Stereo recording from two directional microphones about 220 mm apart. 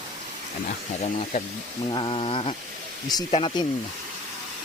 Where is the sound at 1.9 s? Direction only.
20° left (ahead or behind).